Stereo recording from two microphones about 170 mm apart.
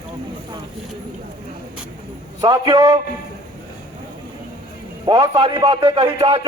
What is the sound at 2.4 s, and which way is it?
Speech, 25° right (ahead or behind).